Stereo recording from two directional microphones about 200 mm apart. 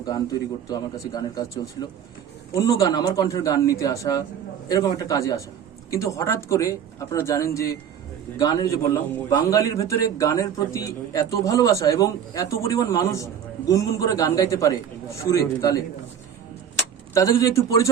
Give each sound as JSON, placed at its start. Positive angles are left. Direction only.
{"t": 0.0, "sound": "a man's voice", "side_deg": 20}
{"t": 17.2, "sound": "speech", "side_deg": 15}